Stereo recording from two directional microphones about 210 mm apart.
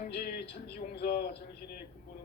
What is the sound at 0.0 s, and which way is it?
Speech, 45° left (ahead or behind).